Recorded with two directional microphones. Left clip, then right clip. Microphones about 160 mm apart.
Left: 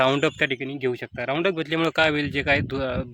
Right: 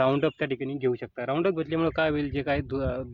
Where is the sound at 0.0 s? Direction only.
10° left (ahead or behind).